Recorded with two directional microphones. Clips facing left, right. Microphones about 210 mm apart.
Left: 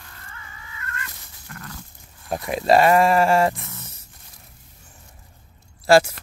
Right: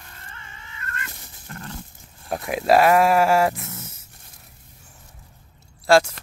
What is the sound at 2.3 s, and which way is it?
Speech, 5° right (ahead or behind).